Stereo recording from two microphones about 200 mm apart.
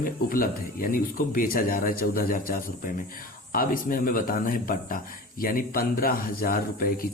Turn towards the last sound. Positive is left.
turn(degrees=45)  # may be behind; listen again after turning